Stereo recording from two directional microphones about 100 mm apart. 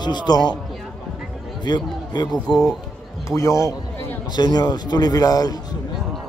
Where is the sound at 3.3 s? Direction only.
30° left (ahead or behind).